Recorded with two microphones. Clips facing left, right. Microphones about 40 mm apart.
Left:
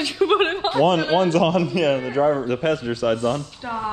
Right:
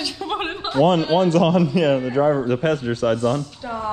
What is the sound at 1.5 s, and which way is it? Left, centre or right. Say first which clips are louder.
Speech: right 2 dB; left.